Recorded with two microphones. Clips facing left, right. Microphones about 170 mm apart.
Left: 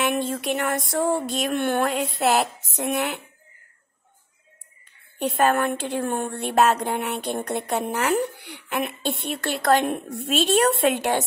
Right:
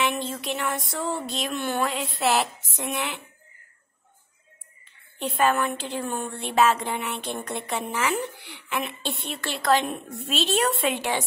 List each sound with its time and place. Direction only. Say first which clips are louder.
0.0 s a woman's voice: left 3 dB; 50° left (ahead or behind)
5.2 s a woman's voice: left 2 dB; 45° left (ahead or behind)